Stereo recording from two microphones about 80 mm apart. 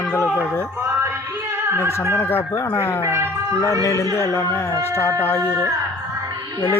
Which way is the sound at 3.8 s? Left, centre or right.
Left.